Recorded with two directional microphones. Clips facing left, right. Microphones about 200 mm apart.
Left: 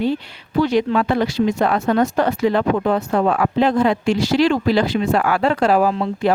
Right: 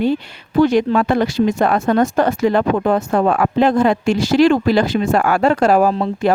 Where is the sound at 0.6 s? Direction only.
50° right (ahead or behind).